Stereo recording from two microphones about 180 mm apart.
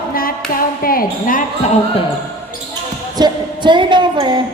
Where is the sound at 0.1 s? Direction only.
55° left (ahead or behind).